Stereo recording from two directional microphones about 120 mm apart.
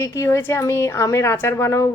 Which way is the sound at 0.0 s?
25° left (ahead or behind).